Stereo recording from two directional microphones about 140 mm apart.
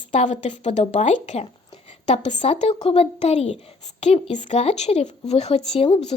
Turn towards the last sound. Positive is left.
turn(degrees=45)  # may be behind; listen again after turning